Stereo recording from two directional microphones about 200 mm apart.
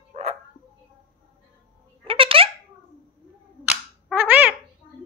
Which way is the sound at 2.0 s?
25° right (ahead or behind).